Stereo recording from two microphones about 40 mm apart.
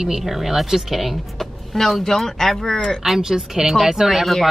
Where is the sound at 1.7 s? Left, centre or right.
Centre.